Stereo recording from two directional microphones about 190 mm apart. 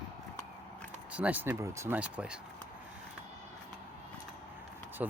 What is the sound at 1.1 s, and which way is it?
Speech, 10° right (ahead or behind).